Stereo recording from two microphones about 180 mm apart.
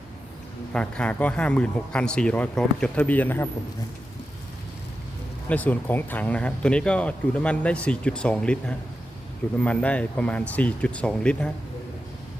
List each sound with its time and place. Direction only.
0.7 s speech: 5° left (ahead or behind)
5.5 s speech: 10° left (ahead or behind)